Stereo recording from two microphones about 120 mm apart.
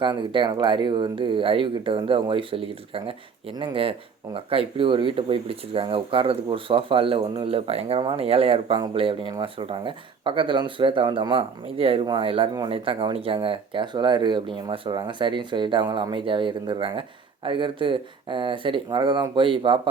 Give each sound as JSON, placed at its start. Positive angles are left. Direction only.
{"t": 0.0, "sound": "speech", "side_deg": -40}